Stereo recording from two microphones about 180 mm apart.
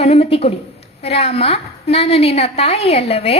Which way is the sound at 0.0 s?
35° left (ahead or behind).